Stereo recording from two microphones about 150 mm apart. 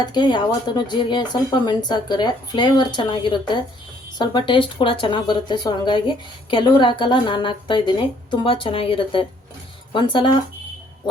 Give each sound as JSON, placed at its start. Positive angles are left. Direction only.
{"t": 0.0, "sound": "speech", "side_deg": 30}